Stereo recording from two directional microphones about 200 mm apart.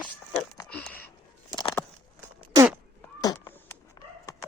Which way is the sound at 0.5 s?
10° left (ahead or behind).